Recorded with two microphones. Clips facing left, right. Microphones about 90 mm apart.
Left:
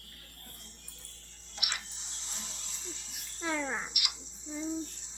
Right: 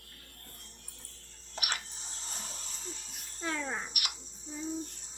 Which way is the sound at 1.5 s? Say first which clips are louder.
Right 3 dB; 45° right (ahead or behind).